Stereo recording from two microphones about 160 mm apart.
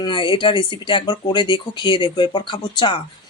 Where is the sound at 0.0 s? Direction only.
30° left (ahead or behind).